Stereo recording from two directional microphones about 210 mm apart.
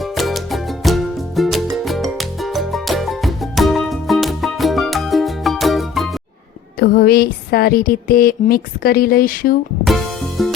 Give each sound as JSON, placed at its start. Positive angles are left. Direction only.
{"t": 0.2, "sound": "music", "side_deg": 0}
{"t": 6.7, "sound": "a sound", "side_deg": 45}
{"t": 9.8, "sound": "music", "side_deg": 0}